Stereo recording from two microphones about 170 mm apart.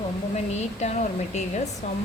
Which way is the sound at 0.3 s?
40° left (ahead or behind).